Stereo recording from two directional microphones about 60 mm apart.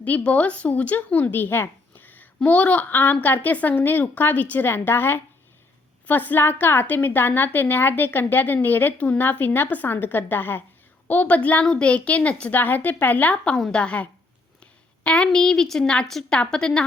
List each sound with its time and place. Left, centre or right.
0.0 s a woman's voice: left
4.7 s a woman's voice: left
12.5 s a woman's voice: left; by 16.8 s centre